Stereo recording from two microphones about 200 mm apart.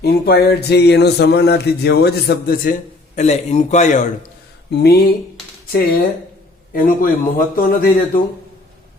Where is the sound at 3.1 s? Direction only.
35° left (ahead or behind).